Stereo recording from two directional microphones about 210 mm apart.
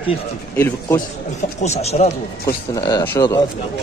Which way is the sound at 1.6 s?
30° left (ahead or behind).